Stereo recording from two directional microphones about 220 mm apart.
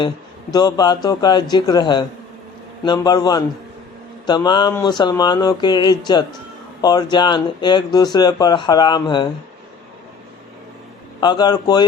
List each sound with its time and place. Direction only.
0.5 s a man's voice: 20° left (ahead or behind)
11.2 s speech: 20° left (ahead or behind)